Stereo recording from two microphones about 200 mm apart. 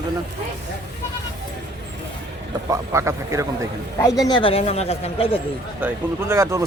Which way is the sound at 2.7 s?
15° right (ahead or behind).